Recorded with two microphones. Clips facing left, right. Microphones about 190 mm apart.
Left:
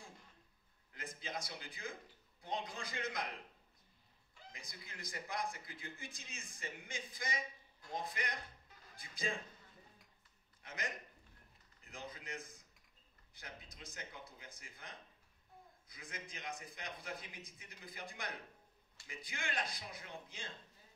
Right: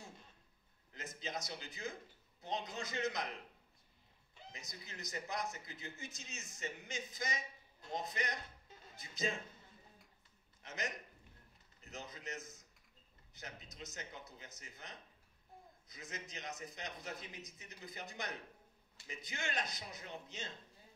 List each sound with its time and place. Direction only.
0.9 s a man's voice: 20° right (ahead or behind)
4.4 s a man's voice: 20° right (ahead or behind)
10.6 s a sound: 20° right (ahead or behind)
11.9 s a man's voice: 20° right (ahead or behind)